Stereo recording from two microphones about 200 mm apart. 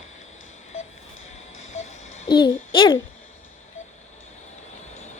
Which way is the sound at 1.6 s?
35° left (ahead or behind).